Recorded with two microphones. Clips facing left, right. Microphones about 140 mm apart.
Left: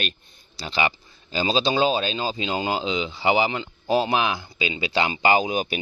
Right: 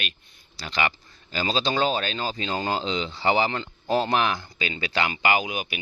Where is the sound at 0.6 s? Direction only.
20° left (ahead or behind).